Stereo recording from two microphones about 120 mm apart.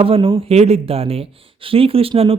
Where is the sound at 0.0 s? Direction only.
50° right (ahead or behind).